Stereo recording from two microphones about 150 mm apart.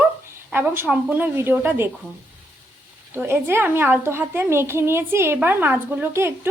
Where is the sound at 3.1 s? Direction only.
15° right (ahead or behind).